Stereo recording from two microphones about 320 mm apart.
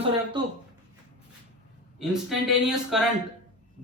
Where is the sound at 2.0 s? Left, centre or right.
Centre.